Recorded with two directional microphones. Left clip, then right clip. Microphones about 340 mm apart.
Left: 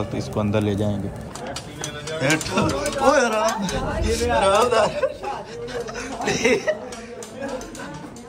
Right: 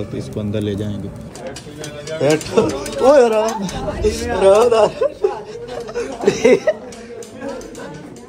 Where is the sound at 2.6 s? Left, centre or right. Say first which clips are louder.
Right 3 dB; left.